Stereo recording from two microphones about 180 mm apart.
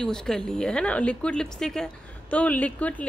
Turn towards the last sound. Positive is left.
turn(degrees=10)  # may be behind; listen again after turning